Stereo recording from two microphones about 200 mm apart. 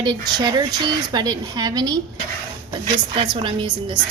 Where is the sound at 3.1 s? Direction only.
25° right (ahead or behind).